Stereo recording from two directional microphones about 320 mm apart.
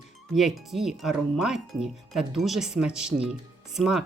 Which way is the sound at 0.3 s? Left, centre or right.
Centre.